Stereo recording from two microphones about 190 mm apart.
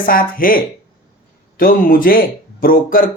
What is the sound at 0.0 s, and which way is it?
Speech, 50° left (ahead or behind).